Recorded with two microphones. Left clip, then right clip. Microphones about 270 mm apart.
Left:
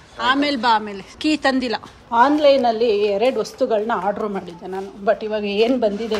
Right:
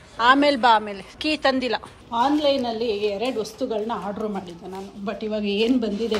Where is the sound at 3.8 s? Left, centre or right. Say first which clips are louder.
Left 7 dB; left.